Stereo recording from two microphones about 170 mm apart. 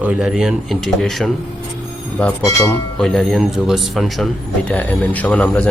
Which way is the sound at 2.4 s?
20° left (ahead or behind).